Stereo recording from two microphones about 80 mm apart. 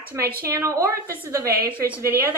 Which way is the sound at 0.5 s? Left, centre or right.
Right.